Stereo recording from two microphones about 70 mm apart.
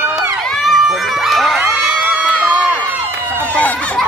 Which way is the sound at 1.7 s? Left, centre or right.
Centre.